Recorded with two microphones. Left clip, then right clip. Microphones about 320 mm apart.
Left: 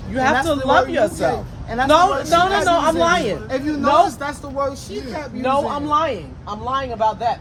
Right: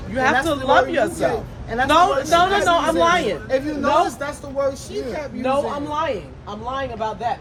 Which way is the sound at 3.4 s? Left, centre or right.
Centre.